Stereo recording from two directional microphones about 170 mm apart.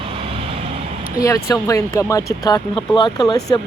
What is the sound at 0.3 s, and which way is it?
Vehicle, 30° right (ahead or behind).